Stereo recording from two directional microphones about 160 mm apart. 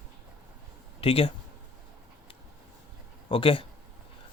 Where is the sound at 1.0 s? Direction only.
35° left (ahead or behind).